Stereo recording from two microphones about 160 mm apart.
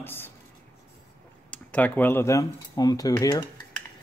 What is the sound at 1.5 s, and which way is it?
Speech, 10° left (ahead or behind).